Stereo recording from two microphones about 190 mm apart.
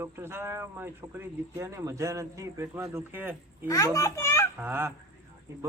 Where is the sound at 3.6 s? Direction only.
15° left (ahead or behind).